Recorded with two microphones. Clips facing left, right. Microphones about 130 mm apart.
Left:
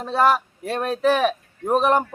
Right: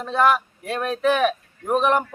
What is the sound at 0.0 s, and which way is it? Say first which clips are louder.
Speech: even; 35° left (ahead or behind).